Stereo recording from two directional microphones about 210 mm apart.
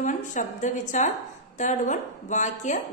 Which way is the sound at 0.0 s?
40° left (ahead or behind).